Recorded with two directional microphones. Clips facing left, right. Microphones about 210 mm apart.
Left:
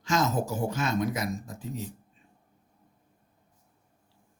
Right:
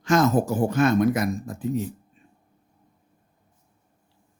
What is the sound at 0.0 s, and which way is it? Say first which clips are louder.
Speech: right 7 dB; 55° right (ahead or behind).